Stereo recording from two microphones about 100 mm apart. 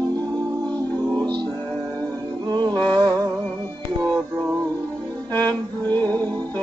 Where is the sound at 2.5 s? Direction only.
40° right (ahead or behind).